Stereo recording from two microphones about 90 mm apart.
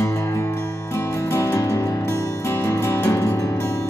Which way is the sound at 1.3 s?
30° left (ahead or behind).